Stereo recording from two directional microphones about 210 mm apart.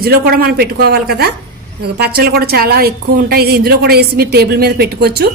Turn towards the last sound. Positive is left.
turn(degrees=-50)  # may be behind; listen again after turning